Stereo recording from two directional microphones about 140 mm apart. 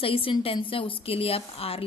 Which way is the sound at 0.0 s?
40° left (ahead or behind).